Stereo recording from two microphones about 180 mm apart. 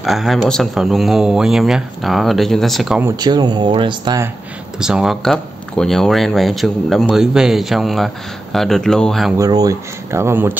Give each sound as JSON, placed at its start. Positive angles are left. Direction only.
{"t": 0.0, "sound": "speech", "side_deg": 0}
{"t": 3.2, "sound": "speech", "side_deg": -25}
{"t": 4.7, "sound": "speech", "side_deg": -5}
{"t": 9.4, "sound": "speech", "side_deg": -20}